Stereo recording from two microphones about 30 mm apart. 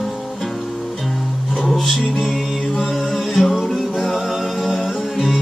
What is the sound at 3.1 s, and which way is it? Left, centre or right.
Music, centre.